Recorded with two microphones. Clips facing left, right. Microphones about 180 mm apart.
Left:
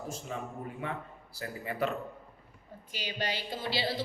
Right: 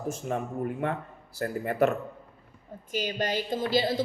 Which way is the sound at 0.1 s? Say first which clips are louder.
Right 11 dB; 55° right (ahead or behind).